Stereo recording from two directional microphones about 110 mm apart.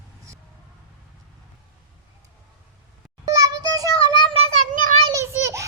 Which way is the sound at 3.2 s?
35° right (ahead or behind).